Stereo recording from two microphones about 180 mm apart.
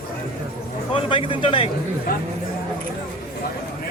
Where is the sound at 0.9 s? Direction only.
30° left (ahead or behind).